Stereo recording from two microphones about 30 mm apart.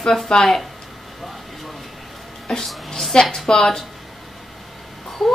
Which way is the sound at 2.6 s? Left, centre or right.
Centre.